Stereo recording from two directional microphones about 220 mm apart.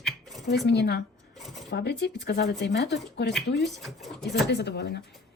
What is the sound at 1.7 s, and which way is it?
A woman's voice, 50° left (ahead or behind).